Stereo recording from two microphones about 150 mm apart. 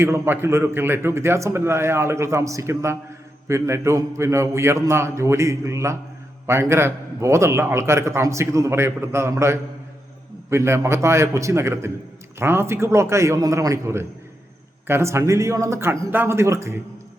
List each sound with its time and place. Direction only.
0.0 s a man's voice: 15° right (ahead or behind)